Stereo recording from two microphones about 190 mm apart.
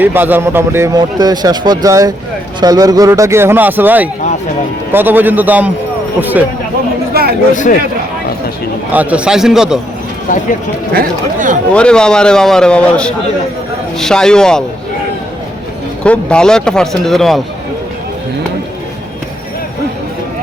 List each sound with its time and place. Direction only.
0.0 s a man's voice: 10° right (ahead or behind)
7.1 s chatter: 55° right (ahead or behind)
8.9 s a man's voice: 10° right (ahead or behind)
10.9 s speech: 45° right (ahead or behind)
11.7 s a man's voice: 5° left (ahead or behind)
16.0 s a man's voice: 5° left (ahead or behind)